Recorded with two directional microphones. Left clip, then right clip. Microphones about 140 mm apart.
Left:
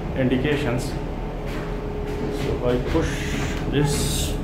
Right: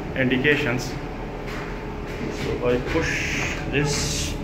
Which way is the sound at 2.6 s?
15° left (ahead or behind).